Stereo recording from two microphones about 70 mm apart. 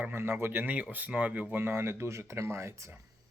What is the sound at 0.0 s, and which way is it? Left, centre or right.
Speech, right.